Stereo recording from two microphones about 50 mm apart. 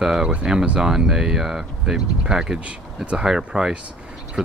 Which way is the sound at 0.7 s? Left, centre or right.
Centre.